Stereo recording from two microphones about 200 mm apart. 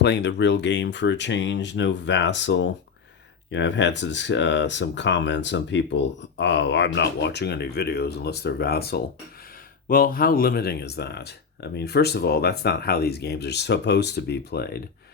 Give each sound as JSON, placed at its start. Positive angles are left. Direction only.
{"t": 0.0, "sound": "speech", "side_deg": 60}